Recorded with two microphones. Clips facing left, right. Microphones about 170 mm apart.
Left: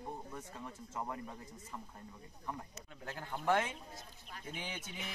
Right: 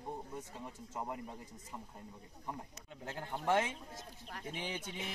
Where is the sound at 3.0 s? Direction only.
25° right (ahead or behind).